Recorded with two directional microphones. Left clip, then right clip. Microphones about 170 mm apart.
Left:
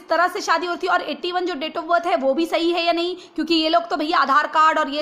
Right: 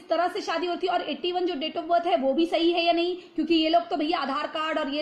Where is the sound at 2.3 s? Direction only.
40° left (ahead or behind).